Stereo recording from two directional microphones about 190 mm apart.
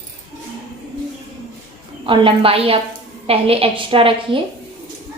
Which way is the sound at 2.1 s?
30° right (ahead or behind).